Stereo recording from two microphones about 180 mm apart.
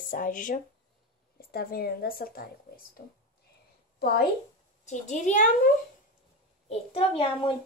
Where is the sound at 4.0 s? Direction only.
60° left (ahead or behind).